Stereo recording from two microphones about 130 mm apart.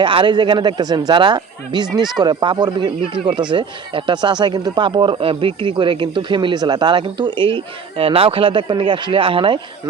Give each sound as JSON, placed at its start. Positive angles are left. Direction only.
{"t": 0.0, "sound": "speech", "side_deg": -40}